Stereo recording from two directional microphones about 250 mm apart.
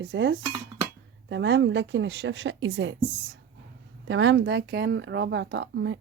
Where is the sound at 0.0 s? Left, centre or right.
Right.